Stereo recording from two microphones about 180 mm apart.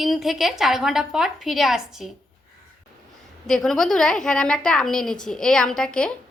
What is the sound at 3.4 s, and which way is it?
Speech, 5° left (ahead or behind).